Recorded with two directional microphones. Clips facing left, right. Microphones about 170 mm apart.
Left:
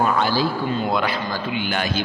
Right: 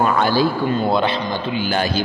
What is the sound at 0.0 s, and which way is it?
Speech, 55° right (ahead or behind).